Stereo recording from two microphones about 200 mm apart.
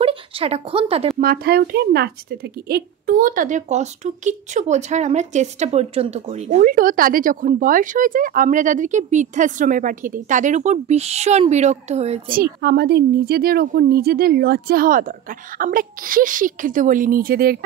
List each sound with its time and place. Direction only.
0.0 s a woman's voice: 25° right (ahead or behind)
1.2 s a woman's voice: 50° right (ahead or behind); by 12.2 s 35° right (ahead or behind)
12.6 s speech: 55° right (ahead or behind)